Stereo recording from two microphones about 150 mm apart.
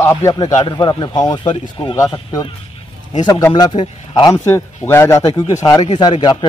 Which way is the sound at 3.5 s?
30° left (ahead or behind).